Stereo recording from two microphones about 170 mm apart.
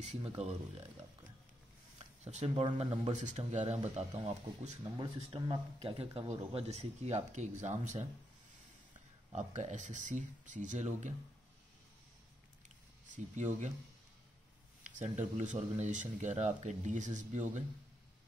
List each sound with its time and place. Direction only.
0.0 s speech: 40° right (ahead or behind)
2.0 s a sound: 40° right (ahead or behind)
2.5 s speech: 30° right (ahead or behind)
3.1 s speech: 45° right (ahead or behind)
4.9 s speech: 25° right (ahead or behind)
5.8 s speech: 35° right (ahead or behind)
9.3 s speech: 45° right (ahead or behind)
12.6 s a sound: 45° right (ahead or behind)
14.8 s speech: 45° right (ahead or behind)